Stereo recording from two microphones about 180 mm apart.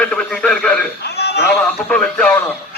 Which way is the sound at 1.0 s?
65° left (ahead or behind).